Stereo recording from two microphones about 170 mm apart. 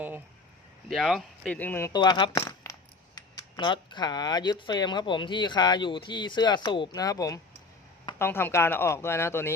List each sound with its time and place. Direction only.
0.9 s speech: centre (ahead or behind)
2.0 s speech: 25° left (ahead or behind)